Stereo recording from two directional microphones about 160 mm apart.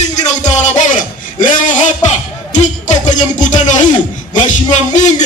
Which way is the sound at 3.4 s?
50° left (ahead or behind).